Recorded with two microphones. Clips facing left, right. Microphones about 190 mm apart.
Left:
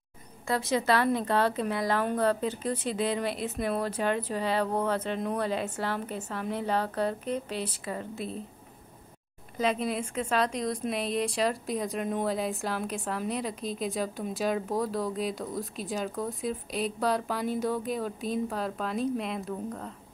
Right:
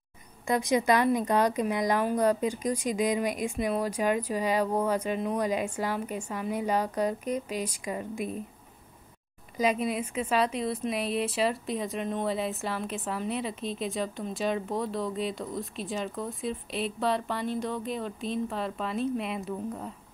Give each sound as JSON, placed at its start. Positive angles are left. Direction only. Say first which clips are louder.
{"t": 0.5, "sound": "speech", "louder": "right 2 dB", "side_deg": -15}
{"t": 9.6, "sound": "a woman's voice", "louder": "right 1 dB", "side_deg": -10}